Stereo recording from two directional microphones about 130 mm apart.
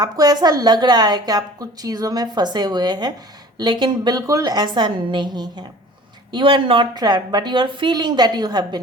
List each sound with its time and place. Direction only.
0.0 s a woman's voice: 30° right (ahead or behind)